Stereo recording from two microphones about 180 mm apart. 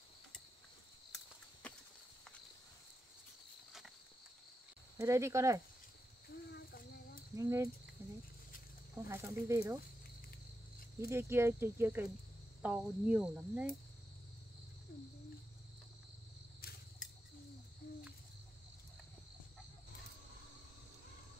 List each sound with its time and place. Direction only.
1.6 s a sound: 5° left (ahead or behind)
4.9 s cricket: 15° right (ahead or behind)
6.2 s a sound: 65° left (ahead or behind)
7.3 s cricket: 15° right (ahead or behind)
9.1 s cricket: 15° right (ahead or behind)
11.0 s cricket: 15° right (ahead or behind)
17.8 s cricket: 55° left (ahead or behind)